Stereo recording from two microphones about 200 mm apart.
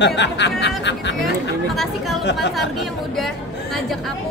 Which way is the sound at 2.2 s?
60° left (ahead or behind).